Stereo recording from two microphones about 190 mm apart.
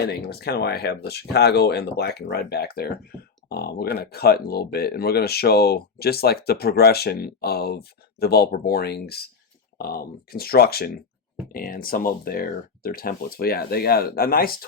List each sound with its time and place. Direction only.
0.0 s speech: 60° left (ahead or behind)